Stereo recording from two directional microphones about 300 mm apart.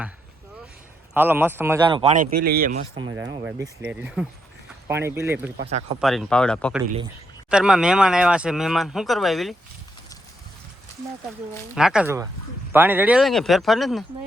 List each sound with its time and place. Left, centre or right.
1.1 s speech: centre
11.7 s speech: centre